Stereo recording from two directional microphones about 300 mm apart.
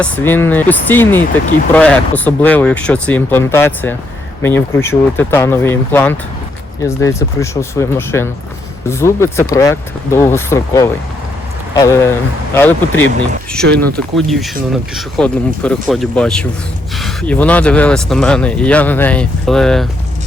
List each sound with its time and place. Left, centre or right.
0.0 s speech: centre
13.6 s speech: right
14.2 s speech: centre